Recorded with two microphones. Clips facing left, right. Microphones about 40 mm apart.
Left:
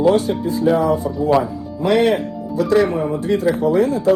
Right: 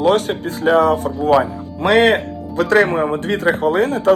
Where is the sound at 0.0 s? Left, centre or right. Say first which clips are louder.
Even; right.